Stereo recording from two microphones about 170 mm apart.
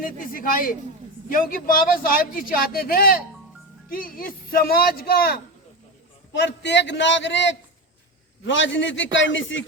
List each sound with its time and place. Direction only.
0.0 s a man's voice: 50° left (ahead or behind)
6.3 s a man's voice: 90° left